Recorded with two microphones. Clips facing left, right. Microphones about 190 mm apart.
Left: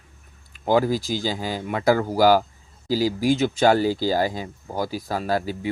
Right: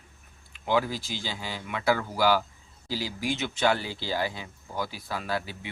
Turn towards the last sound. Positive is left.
turn(degrees=40)  # may be behind; listen again after turning